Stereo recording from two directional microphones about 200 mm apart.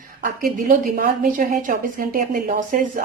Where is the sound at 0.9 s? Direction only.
45° right (ahead or behind).